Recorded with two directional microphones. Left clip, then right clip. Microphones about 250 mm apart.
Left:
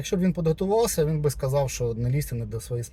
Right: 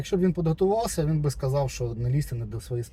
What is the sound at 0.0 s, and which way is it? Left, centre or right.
Speech, centre.